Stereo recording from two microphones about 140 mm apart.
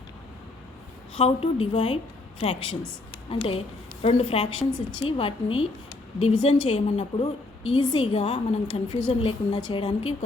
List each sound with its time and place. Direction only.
1.1 s a woman's voice: 40° left (ahead or behind)